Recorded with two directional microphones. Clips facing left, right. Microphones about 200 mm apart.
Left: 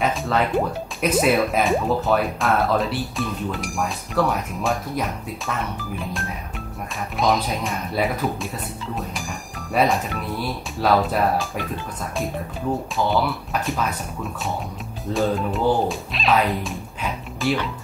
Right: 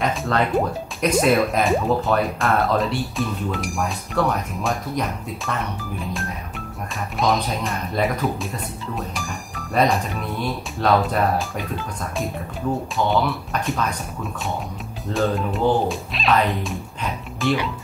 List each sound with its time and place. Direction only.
0.0 s speech: centre (ahead or behind)
12.9 s speech: centre (ahead or behind)